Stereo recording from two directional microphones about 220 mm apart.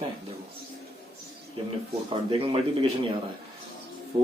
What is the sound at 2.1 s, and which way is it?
Speech, 25° right (ahead or behind).